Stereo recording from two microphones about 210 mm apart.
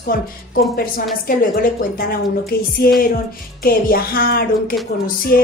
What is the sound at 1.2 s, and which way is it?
Speech, 45° left (ahead or behind).